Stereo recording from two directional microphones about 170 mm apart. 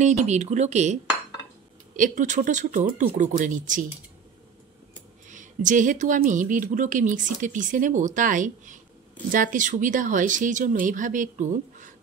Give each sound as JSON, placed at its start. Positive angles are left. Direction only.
{"t": 0.0, "sound": "speech", "side_deg": -45}
{"t": 2.0, "sound": "speech", "side_deg": -50}
{"t": 5.3, "sound": "speech", "side_deg": -50}